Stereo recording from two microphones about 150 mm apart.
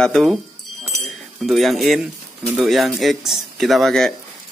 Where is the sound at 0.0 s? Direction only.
Centre (ahead or behind).